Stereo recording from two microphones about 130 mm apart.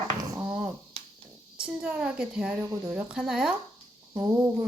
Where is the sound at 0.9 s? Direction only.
50° right (ahead or behind).